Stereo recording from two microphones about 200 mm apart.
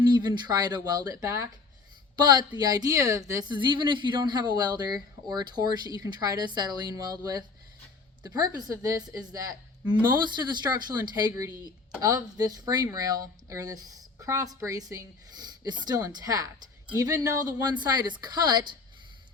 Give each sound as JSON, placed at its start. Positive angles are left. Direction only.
{"t": 0.0, "sound": "a woman's voice", "side_deg": -20}
{"t": 12.5, "sound": "a woman's voice", "side_deg": -20}